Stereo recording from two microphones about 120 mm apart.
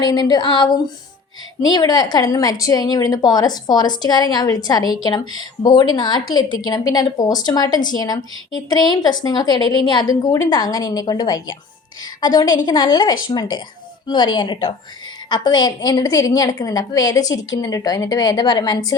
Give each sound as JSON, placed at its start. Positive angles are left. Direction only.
{"t": 0.0, "sound": "a woman's voice", "side_deg": 35}